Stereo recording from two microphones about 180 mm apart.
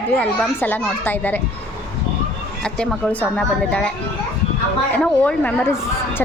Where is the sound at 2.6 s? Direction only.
5° left (ahead or behind).